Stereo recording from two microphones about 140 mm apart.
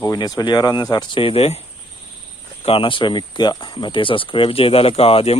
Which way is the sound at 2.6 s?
40° left (ahead or behind).